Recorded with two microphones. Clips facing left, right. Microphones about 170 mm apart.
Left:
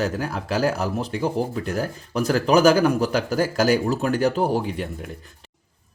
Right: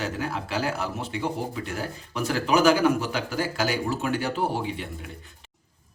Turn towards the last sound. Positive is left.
turn(degrees=45)  # may be behind; listen again after turning